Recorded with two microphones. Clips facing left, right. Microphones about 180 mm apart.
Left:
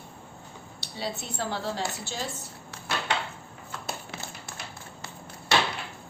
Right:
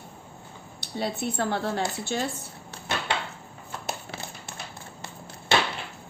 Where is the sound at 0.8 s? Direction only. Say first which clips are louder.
Right 5 dB; 55° right (ahead or behind).